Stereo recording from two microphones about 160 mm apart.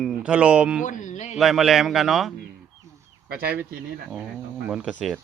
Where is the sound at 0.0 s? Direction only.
5° right (ahead or behind).